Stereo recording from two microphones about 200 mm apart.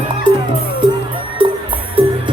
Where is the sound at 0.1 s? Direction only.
25° right (ahead or behind).